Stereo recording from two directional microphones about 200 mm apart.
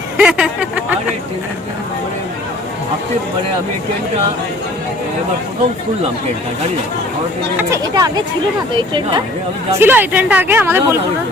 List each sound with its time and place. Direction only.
0.2 s speech: 5° right (ahead or behind)
7.7 s speech: 20° right (ahead or behind)
9.7 s speech: 10° right (ahead or behind)